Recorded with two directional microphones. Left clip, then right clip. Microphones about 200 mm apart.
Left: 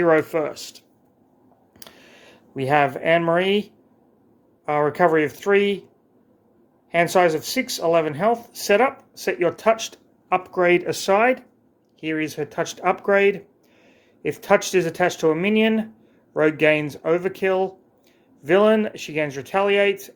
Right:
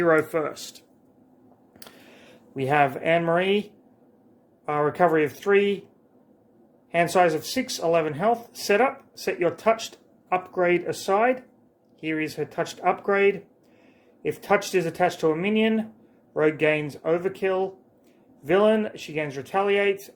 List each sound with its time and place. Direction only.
0.0 s speech: 20° left (ahead or behind)
1.8 s a sound: 15° left (ahead or behind)
4.6 s speech: 20° left (ahead or behind)
6.9 s speech: 20° left (ahead or behind)